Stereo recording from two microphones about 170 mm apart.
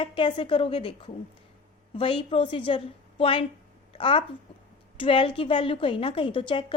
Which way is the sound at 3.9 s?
30° left (ahead or behind).